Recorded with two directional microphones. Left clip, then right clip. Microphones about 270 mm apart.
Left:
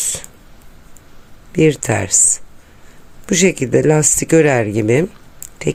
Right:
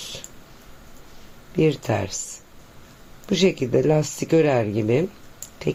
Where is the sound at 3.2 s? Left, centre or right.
Left.